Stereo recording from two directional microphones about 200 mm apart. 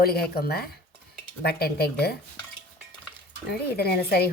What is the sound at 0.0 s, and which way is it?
Speech, 50° left (ahead or behind).